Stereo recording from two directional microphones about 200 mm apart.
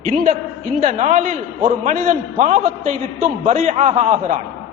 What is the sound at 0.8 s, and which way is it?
A man's voice, 35° right (ahead or behind).